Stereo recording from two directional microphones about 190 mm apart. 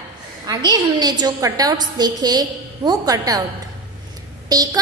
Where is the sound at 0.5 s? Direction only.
20° right (ahead or behind).